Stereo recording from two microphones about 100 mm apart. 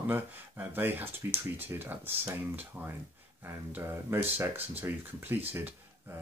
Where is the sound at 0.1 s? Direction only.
20° right (ahead or behind).